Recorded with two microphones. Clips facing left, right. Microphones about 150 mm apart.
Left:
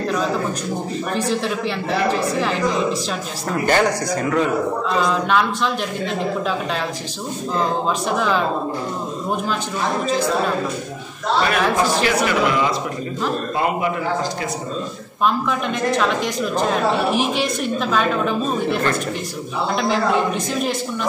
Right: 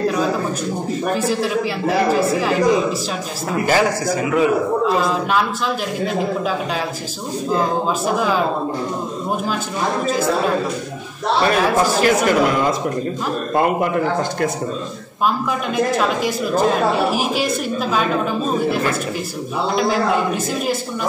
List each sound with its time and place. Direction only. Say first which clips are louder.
1.1 s a man's voice: right 1 dB; 5° right (ahead or behind)
11.5 s a man's voice: right 2 dB; 45° right (ahead or behind)
15.2 s a woman's voice: even; 5° right (ahead or behind)